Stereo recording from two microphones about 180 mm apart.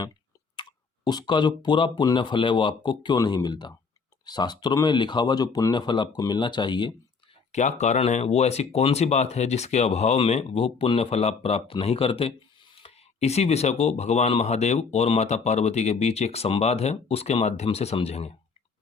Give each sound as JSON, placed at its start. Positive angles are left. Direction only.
{"t": 0.5, "sound": "speech", "side_deg": 25}
{"t": 7.5, "sound": "speech", "side_deg": 40}